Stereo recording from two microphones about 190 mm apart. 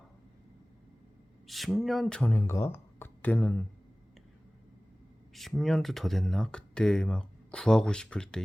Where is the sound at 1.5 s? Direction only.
Centre (ahead or behind).